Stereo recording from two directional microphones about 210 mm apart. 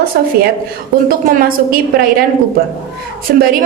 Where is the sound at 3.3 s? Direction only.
50° right (ahead or behind).